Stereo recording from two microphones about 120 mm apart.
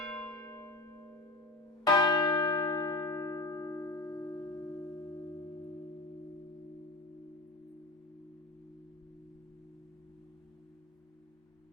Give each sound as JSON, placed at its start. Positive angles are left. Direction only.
{"t": 0.0, "sound": "a sound", "side_deg": 10}
{"t": 1.8, "sound": "church bell", "side_deg": 30}
{"t": 3.0, "sound": "music", "side_deg": 25}